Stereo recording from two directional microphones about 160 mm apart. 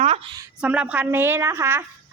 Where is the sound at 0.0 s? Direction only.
40° right (ahead or behind).